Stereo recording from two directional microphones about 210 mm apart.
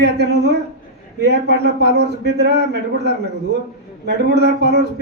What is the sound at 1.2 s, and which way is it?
Speech, 55° right (ahead or behind).